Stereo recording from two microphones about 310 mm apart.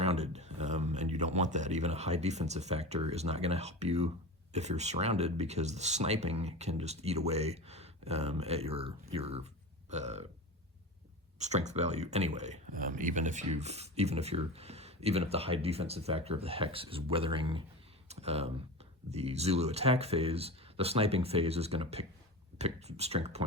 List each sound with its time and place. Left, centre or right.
0.0 s speech: right
11.3 s speech: right